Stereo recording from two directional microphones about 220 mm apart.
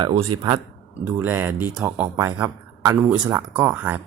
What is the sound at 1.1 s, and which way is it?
Speech, 10° right (ahead or behind).